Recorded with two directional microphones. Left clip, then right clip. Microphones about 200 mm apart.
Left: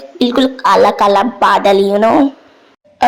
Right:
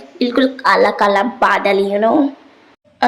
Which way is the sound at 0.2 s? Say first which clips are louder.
Left 3 dB; 15° left (ahead or behind).